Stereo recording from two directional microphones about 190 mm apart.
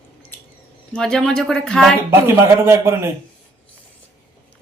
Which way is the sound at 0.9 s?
5° left (ahead or behind).